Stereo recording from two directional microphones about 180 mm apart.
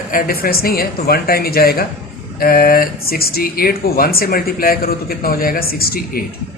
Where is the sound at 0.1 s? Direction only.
55° left (ahead or behind).